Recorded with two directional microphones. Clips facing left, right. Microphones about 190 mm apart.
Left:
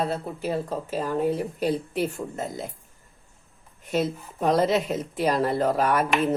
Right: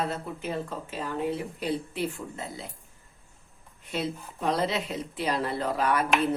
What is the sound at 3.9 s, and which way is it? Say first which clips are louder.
Speech: left 6 dB; 45° left (ahead or behind).